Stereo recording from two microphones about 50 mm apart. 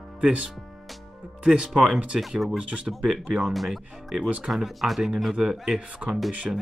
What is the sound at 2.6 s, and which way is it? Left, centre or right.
Speech, centre.